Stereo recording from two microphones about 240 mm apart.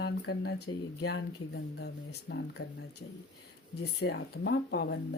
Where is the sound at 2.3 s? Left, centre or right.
Left.